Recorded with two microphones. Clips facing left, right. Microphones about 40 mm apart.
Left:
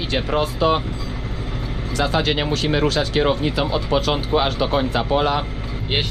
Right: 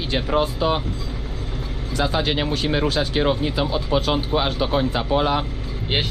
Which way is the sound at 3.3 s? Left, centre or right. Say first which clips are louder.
Left 1 dB; centre.